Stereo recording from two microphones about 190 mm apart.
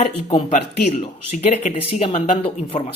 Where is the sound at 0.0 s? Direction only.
35° left (ahead or behind).